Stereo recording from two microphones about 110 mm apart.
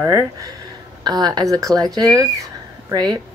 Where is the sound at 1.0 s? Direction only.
40° right (ahead or behind).